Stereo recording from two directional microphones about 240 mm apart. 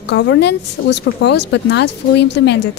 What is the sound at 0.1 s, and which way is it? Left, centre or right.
A woman's voice, left.